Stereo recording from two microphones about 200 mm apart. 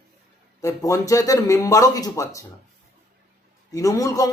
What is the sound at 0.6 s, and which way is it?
Speech, 15° left (ahead or behind).